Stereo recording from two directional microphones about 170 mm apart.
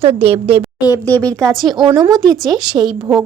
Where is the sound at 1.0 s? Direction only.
10° left (ahead or behind).